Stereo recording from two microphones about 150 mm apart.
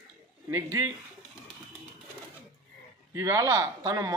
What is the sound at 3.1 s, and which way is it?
A man's voice, 20° right (ahead or behind).